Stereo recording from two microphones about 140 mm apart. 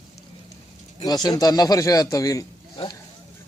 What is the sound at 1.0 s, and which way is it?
A man's voice, 30° left (ahead or behind).